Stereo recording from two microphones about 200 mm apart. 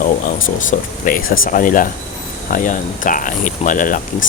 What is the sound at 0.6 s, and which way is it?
Speech, 45° left (ahead or behind).